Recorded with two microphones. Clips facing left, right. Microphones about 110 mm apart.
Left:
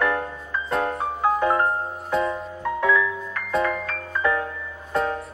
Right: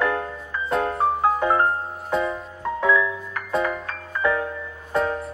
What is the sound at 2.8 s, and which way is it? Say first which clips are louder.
Music: right 1 dB; 20° right (ahead or behind).